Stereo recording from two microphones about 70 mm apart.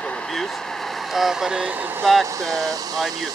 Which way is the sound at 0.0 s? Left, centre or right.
Centre.